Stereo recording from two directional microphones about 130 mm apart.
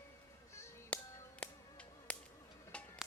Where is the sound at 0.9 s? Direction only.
10° left (ahead or behind).